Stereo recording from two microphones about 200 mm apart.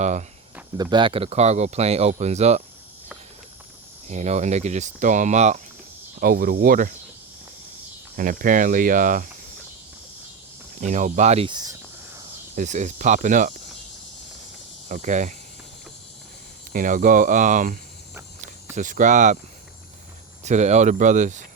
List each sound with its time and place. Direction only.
0.0 s speech: 35° right (ahead or behind)
0.8 s speech: 20° right (ahead or behind)
4.1 s speech: 35° right (ahead or behind)
6.1 s speech: 45° right (ahead or behind)
8.1 s speech: 45° right (ahead or behind)
10.8 s speech: 35° right (ahead or behind); by 12.2 s 15° right (ahead or behind)
12.5 s speech: 35° right (ahead or behind)
14.8 s speech: 40° right (ahead or behind)
16.7 s speech: 40° right (ahead or behind)
20.4 s speech: 35° right (ahead or behind)